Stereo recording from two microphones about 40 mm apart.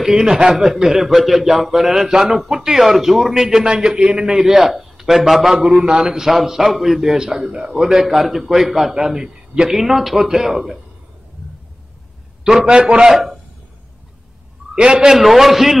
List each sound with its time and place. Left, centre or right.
0.0 s a man's voice: centre
4.3 s a man's voice: centre
7.8 s a man's voice: centre
12.6 s a man's voice: right
13.1 s a man's voice: centre
14.8 s a man's voice: right
15.0 s a man's voice: centre